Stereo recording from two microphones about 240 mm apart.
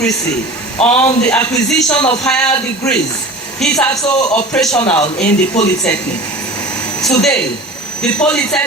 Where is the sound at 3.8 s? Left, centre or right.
Centre.